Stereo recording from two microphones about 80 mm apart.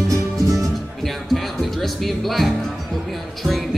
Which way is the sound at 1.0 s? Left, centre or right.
Centre.